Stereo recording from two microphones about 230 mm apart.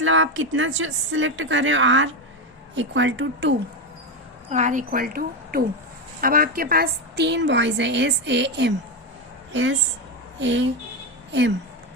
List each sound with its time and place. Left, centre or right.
0.0 s a woman's voice: right
4.4 s a woman's voice: right